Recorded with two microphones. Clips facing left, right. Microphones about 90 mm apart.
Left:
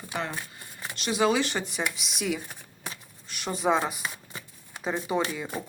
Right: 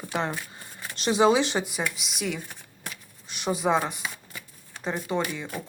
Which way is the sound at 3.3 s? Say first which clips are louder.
Right 5 dB; 20° right (ahead or behind).